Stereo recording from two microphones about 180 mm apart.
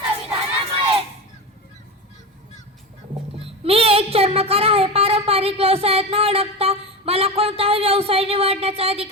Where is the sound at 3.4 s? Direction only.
30° right (ahead or behind).